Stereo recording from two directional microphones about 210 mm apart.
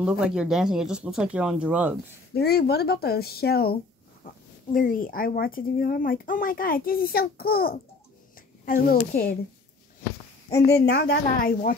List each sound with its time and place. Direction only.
0.0 s speech: 5° right (ahead or behind)
2.3 s speech: 50° left (ahead or behind)
4.7 s speech: 40° left (ahead or behind)
10.5 s speech: 50° left (ahead or behind)